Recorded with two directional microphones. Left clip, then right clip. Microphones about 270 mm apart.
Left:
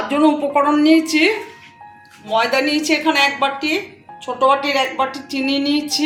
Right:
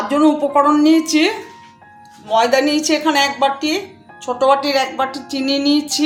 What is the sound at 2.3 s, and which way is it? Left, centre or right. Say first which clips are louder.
A woman's voice: right 3 dB; right.